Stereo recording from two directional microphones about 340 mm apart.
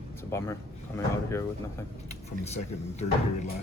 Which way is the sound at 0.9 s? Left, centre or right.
Centre.